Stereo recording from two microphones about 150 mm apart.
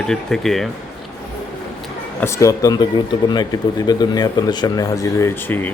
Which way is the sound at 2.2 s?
20° left (ahead or behind).